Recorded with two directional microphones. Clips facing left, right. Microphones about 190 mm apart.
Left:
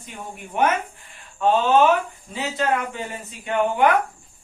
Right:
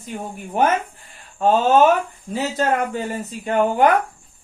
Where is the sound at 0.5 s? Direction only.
35° right (ahead or behind).